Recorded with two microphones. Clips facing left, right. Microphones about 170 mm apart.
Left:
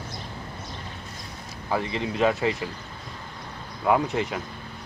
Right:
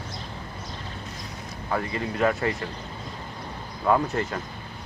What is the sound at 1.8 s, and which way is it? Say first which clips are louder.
Speech: left 1 dB; 20° left (ahead or behind).